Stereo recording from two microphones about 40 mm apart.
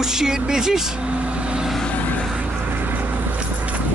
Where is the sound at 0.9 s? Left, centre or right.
Right.